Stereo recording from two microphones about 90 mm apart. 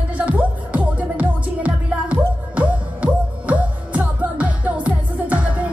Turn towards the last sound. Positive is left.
turn(degrees=-15)  # may be behind; listen again after turning